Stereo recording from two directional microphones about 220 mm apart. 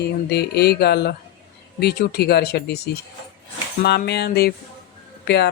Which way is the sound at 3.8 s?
45° left (ahead or behind).